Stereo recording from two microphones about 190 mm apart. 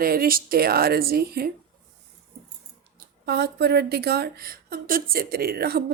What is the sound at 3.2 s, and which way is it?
A woman's voice, 60° right (ahead or behind).